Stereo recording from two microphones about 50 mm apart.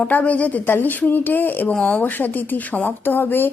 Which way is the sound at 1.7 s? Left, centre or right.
Centre.